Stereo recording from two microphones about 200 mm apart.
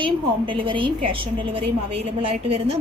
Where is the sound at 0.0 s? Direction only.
25° right (ahead or behind).